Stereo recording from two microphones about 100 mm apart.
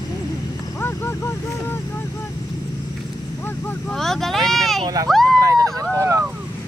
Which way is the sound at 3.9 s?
5° left (ahead or behind).